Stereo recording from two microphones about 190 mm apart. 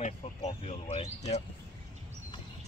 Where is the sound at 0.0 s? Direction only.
35° left (ahead or behind).